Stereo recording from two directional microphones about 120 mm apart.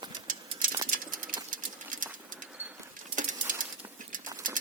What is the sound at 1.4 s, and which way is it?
Sewing machine, 90° right.